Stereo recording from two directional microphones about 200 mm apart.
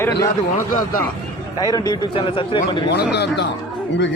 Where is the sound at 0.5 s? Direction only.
40° left (ahead or behind).